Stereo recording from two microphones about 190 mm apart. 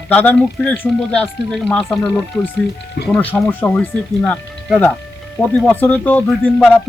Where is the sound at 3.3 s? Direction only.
10° left (ahead or behind).